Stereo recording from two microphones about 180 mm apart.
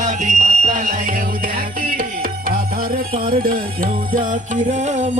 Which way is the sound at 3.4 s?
50° right (ahead or behind).